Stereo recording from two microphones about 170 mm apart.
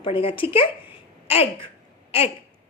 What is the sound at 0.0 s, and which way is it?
A woman's voice, 30° left (ahead or behind).